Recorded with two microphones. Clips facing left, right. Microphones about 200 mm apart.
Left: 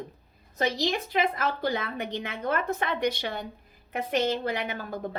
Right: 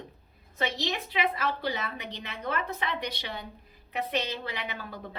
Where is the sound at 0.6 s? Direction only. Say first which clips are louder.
Left 4 dB; 45° left (ahead or behind).